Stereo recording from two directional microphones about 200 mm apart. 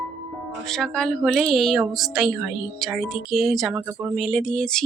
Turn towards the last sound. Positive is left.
turn(degrees=5)  # may be behind; listen again after turning